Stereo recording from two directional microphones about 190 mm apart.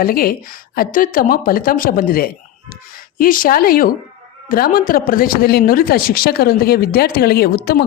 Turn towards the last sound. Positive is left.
turn(degrees=55)  # may be behind; listen again after turning